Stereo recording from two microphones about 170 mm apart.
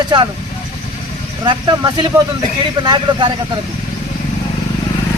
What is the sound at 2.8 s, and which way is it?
Speech, 25° right (ahead or behind).